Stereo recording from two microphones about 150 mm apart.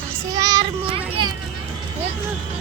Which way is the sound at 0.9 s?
35° right (ahead or behind).